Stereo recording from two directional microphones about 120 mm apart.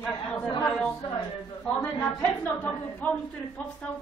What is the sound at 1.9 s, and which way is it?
A woman's voice, 10° left (ahead or behind).